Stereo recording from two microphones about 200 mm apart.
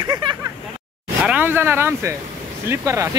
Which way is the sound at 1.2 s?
10° right (ahead or behind).